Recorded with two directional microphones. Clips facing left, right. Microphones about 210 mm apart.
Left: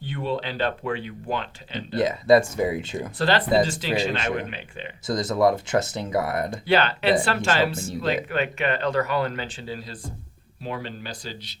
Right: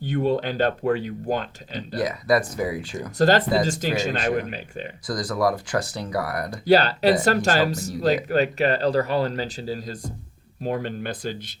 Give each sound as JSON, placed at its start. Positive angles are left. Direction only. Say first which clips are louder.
{"t": 0.0, "sound": "speech", "louder": "right 6 dB", "side_deg": -45}
{"t": 1.9, "sound": "speech", "louder": "left 4 dB", "side_deg": 25}
{"t": 3.2, "sound": "speech", "louder": "right 2 dB", "side_deg": -45}
{"t": 5.0, "sound": "speech", "louder": "left 3 dB", "side_deg": 25}
{"t": 6.5, "sound": "speech", "louder": "right 7 dB", "side_deg": -40}